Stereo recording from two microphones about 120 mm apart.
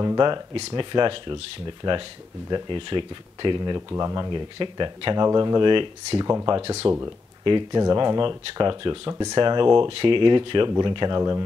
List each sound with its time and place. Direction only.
0.0 s speech: 35° right (ahead or behind)
0.6 s speech: 55° right (ahead or behind)
0.9 s speech: 45° right (ahead or behind)